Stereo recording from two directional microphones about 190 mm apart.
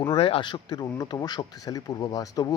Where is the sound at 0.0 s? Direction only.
25° left (ahead or behind).